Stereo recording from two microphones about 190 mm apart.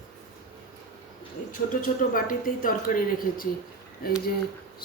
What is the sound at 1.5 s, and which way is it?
Speech, 45° left (ahead or behind).